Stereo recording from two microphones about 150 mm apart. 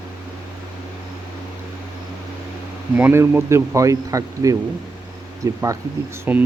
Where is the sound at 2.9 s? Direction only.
15° right (ahead or behind).